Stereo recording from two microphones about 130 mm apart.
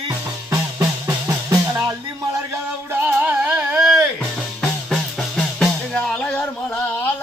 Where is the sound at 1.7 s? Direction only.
15° right (ahead or behind); by 7.1 s 15° left (ahead or behind).